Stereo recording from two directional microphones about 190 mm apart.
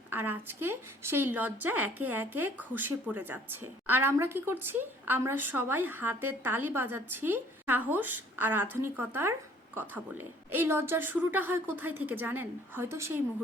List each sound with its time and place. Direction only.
0.1 s a woman's voice: 10° right (ahead or behind)